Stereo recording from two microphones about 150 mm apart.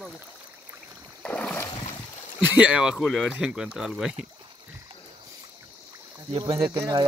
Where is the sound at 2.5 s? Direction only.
5° right (ahead or behind).